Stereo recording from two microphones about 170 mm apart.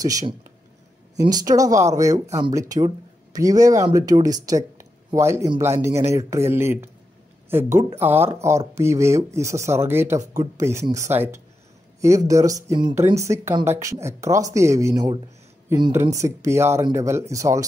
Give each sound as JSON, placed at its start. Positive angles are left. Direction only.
{"t": 0.0, "sound": "speech", "side_deg": -20}
{"t": 3.3, "sound": "speech", "side_deg": -20}